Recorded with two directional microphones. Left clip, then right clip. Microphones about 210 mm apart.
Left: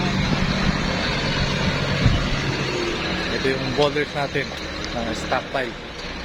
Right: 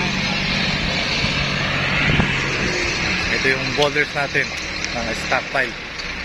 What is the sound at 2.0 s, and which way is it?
Music, 50° left (ahead or behind).